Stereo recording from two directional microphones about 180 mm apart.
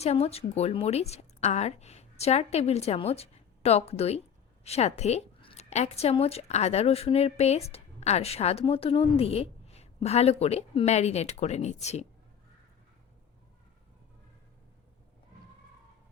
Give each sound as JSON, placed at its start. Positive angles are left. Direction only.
{"t": 0.0, "sound": "a woman's voice", "side_deg": 35}